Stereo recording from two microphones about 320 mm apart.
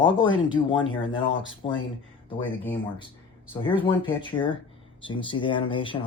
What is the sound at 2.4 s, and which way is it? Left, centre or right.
Speech, centre.